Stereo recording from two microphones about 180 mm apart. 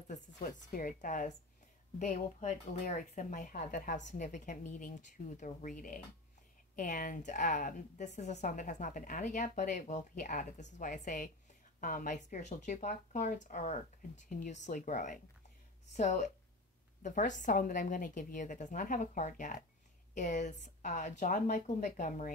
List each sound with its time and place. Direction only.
0.1 s a woman's voice: 50° left (ahead or behind)